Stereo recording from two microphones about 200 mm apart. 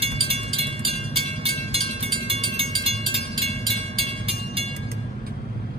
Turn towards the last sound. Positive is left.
turn(degrees=-30)  # may be behind; listen again after turning